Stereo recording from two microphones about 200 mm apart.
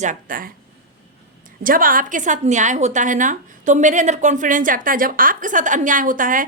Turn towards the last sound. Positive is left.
turn(degrees=-40)  # may be behind; listen again after turning